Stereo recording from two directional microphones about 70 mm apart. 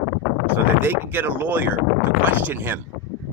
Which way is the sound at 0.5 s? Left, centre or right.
Right.